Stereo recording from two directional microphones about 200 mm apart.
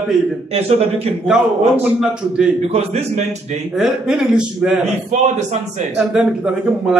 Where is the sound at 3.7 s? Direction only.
5° right (ahead or behind).